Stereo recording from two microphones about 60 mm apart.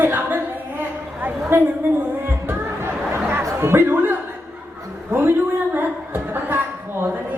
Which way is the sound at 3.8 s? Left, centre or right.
Right.